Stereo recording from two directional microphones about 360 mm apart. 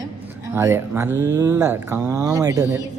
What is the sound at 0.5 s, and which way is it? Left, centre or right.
Speech, centre.